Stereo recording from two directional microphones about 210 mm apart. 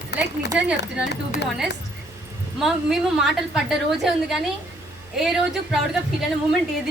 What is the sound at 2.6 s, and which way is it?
A woman's voice, centre (ahead or behind).